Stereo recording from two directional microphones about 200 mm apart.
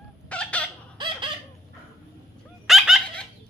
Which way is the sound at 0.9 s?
25° right (ahead or behind).